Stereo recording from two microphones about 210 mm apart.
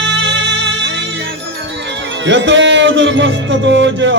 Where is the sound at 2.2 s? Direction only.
60° right (ahead or behind).